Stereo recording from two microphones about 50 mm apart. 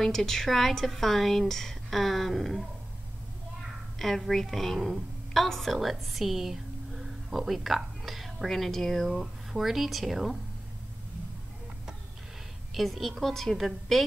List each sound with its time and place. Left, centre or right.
0.0 s a woman's voice: centre
4.0 s a woman's voice: centre
9.1 s a woman's voice: centre
12.7 s a woman's voice: centre